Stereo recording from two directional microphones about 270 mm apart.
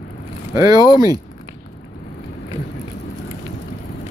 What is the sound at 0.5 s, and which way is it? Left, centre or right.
Speech, centre.